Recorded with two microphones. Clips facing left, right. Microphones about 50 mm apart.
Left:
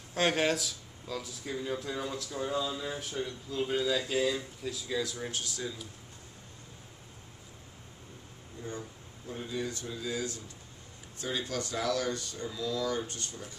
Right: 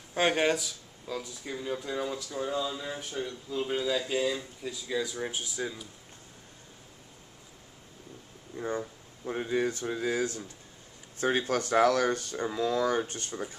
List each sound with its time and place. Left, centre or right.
0.1 s speech: centre
8.5 s speech: right